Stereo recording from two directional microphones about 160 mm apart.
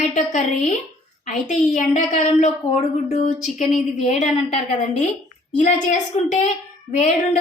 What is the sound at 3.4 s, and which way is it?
Speech, centre (ahead or behind).